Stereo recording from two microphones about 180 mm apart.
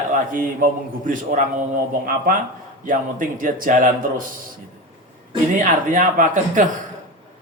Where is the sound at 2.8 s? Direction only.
50° right (ahead or behind).